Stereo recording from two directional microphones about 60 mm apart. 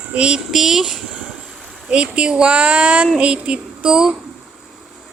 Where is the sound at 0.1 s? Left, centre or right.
Centre.